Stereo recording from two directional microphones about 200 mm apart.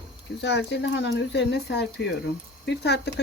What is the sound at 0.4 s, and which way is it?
Speech, 60° left (ahead or behind).